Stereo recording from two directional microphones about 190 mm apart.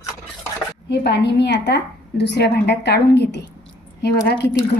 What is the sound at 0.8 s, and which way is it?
A woman's voice, 60° left (ahead or behind).